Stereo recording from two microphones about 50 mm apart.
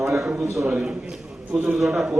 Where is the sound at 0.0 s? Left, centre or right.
Centre.